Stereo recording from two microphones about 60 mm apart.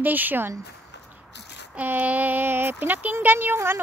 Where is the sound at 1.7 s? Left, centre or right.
Right.